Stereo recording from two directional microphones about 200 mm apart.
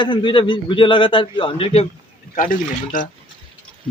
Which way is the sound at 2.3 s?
40° left (ahead or behind).